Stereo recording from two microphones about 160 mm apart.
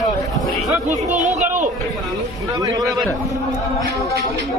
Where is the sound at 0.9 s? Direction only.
50° right (ahead or behind).